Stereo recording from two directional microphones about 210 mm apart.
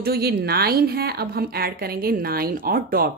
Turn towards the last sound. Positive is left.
turn(degrees=-45)  # may be behind; listen again after turning